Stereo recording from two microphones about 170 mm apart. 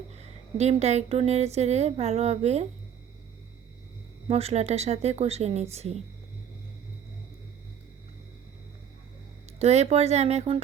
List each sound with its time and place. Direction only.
0.1 s speech: 40° right (ahead or behind)
4.3 s speech: 35° right (ahead or behind)
9.6 s speech: 40° right (ahead or behind)